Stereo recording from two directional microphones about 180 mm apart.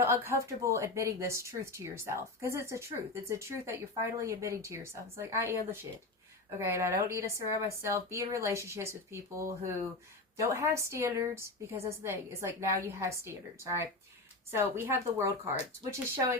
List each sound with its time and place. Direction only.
0.0 s a woman's voice: 15° right (ahead or behind)
14.5 s a woman's voice: 15° right (ahead or behind)